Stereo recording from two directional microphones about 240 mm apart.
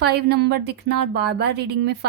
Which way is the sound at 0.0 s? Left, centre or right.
Right.